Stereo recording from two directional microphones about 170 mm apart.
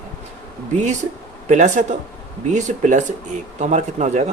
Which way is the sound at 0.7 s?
45° right (ahead or behind).